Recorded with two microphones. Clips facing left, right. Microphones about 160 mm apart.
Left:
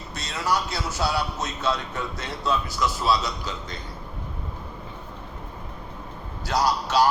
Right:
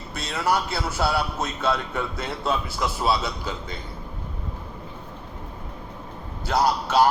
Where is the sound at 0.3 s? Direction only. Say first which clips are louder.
Right 2 dB; 55° right (ahead or behind).